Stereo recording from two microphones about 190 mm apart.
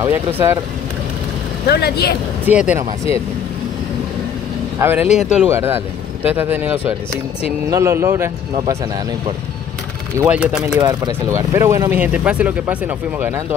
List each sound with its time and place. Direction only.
0.0 s speech: 10° right (ahead or behind)
1.7 s speech: 55° left (ahead or behind)
2.4 s speech: 5° right (ahead or behind)
4.7 s speech: 10° right (ahead or behind)
5.0 s speech: 35° left (ahead or behind)
5.4 s speech: 10° right (ahead or behind)
10.1 s speech: 10° right (ahead or behind)
10.8 s speech: 20° right (ahead or behind)